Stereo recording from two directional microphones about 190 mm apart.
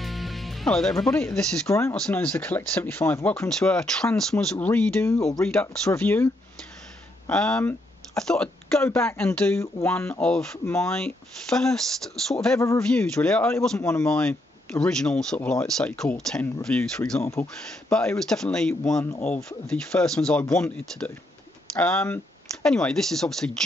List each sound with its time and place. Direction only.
0.0 s music: centre (ahead or behind)
1.2 s speech: 5° left (ahead or behind)
12.5 s speech: 15° left (ahead or behind)
12.9 s speech: 5° left (ahead or behind)